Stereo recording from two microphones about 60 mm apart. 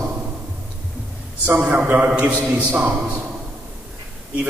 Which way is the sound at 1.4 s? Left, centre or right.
Right.